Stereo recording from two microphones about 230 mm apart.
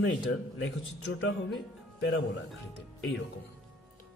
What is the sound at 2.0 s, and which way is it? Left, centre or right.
Speech, left.